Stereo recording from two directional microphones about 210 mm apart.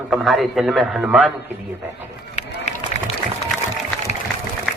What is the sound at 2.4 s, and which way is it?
Run, 35° left (ahead or behind).